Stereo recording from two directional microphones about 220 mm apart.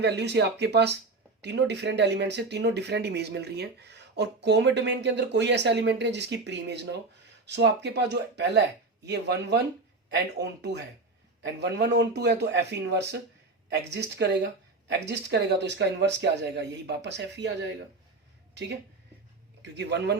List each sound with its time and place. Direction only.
0.0 s speech: 50° right (ahead or behind)
19.6 s speech: 50° right (ahead or behind)